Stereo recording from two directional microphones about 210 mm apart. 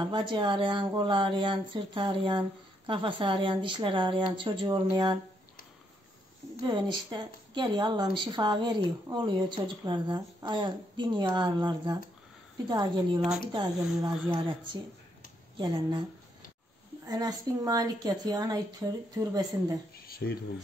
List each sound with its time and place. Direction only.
0.0 s speech: 20° right (ahead or behind)
6.6 s speech: 20° right (ahead or behind)
17.0 s a woman's voice: 15° right (ahead or behind)
20.1 s a sound: 45° left (ahead or behind)